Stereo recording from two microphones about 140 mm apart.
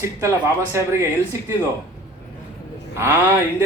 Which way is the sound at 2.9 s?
20° right (ahead or behind).